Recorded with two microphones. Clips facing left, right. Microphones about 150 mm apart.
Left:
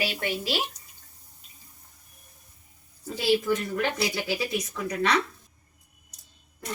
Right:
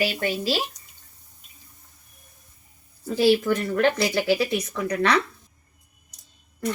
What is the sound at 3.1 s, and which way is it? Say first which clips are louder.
Speech: right 5 dB; 65° right (ahead or behind).